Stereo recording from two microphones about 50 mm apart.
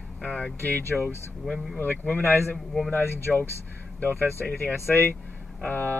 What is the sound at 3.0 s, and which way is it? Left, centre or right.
Speech, left.